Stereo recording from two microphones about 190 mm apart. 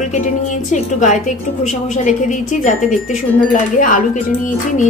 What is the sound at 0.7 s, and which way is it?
A woman's voice, 40° left (ahead or behind).